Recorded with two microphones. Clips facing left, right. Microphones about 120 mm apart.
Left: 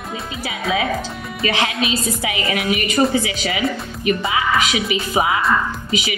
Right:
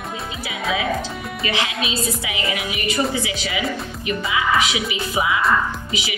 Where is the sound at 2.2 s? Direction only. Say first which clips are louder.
Left 4 dB; 50° left (ahead or behind).